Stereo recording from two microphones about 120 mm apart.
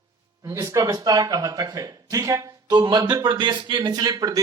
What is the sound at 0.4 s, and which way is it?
A man's voice, 25° right (ahead or behind).